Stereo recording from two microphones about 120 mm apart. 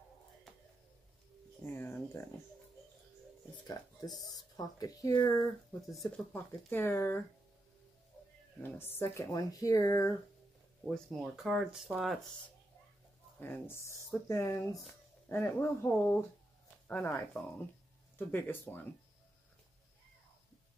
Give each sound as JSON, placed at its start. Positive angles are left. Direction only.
{"t": 1.7, "sound": "a sound", "side_deg": 15}
{"t": 3.6, "sound": "speech", "side_deg": 35}
{"t": 5.8, "sound": "speech", "side_deg": 0}
{"t": 6.3, "sound": "speech", "side_deg": 20}
{"t": 8.5, "sound": "speech", "side_deg": 15}
{"t": 10.8, "sound": "speech", "side_deg": 0}
{"t": 13.4, "sound": "speech", "side_deg": 20}
{"t": 17.3, "sound": "speech", "side_deg": 0}
{"t": 18.1, "sound": "speech", "side_deg": 15}